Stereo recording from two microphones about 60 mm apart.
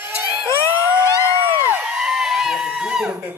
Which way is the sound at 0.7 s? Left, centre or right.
Right.